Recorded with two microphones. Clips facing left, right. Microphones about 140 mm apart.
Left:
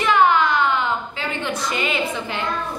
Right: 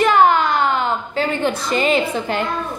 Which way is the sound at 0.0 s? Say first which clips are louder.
Right 3 dB; 45° right (ahead or behind).